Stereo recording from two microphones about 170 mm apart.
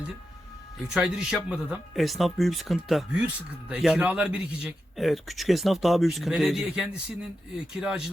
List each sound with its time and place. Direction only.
0.9 s speech: 5° right (ahead or behind)